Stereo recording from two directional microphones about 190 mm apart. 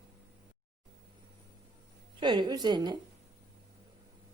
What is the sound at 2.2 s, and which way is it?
Speech, 25° right (ahead or behind).